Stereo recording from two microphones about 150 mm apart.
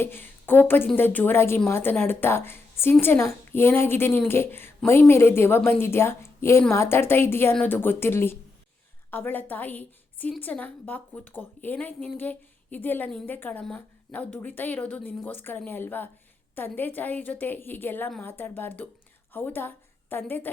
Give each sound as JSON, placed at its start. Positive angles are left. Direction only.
{"t": 0.0, "sound": "a woman's voice", "side_deg": 15}